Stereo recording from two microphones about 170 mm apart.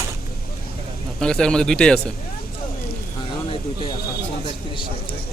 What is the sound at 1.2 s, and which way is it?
Speech, 5° left (ahead or behind).